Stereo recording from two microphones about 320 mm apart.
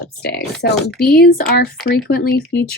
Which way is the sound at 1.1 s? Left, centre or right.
Left.